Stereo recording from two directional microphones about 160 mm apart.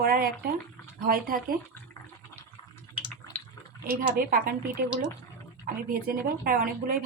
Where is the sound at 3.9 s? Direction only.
65° right (ahead or behind).